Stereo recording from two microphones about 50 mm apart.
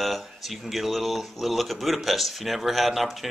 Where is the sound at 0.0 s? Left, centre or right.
Centre.